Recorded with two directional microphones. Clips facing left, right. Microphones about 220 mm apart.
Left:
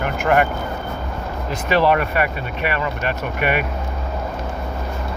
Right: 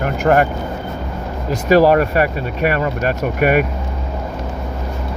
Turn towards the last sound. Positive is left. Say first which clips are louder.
# right 6 dB
turn(degrees=-45)  # may be behind; listen again after turning